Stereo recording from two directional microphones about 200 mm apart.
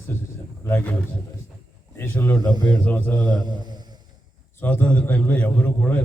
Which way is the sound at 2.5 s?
20° right (ahead or behind).